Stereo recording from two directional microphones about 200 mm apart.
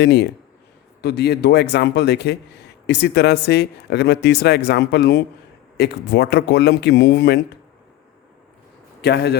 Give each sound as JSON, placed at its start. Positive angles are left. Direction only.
{"t": 0.0, "sound": "speech", "side_deg": 55}
{"t": 9.0, "sound": "a man's voice", "side_deg": 55}